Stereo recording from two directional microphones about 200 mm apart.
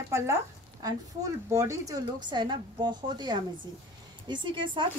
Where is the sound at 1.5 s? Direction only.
15° right (ahead or behind).